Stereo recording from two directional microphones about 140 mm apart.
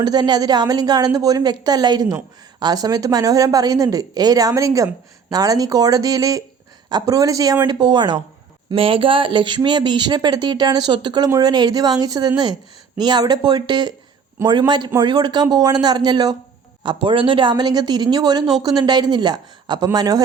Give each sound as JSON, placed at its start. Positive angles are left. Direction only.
{"t": 0.0, "sound": "a woman's voice", "side_deg": -30}
{"t": 14.4, "sound": "a woman's voice", "side_deg": -20}
{"t": 15.0, "sound": "a woman's voice", "side_deg": -30}